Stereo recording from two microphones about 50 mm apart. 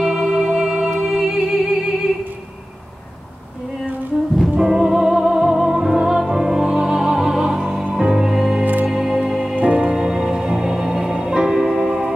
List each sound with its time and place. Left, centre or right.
0.0 s music: centre
4.6 s music: centre
9.6 s music: right
9.8 s music: centre